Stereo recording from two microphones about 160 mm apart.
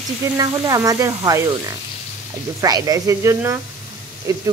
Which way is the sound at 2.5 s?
20° right (ahead or behind).